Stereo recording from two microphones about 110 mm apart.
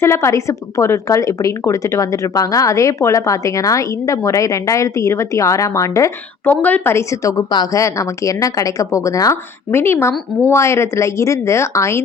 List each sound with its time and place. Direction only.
0.0 s a woman's voice: 25° left (ahead or behind)
6.4 s a woman's voice: 15° left (ahead or behind)